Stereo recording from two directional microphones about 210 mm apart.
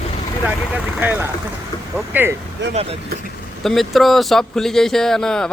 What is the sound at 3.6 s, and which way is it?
Speech, centre (ahead or behind).